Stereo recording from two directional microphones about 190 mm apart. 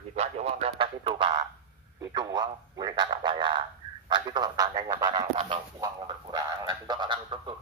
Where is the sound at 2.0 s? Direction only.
20° right (ahead or behind).